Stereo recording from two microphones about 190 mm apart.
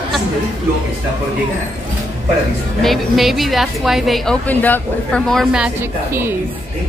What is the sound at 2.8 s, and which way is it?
A woman's voice, centre (ahead or behind).